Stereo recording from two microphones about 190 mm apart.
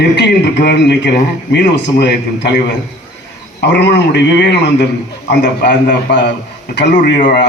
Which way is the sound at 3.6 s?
65° left (ahead or behind).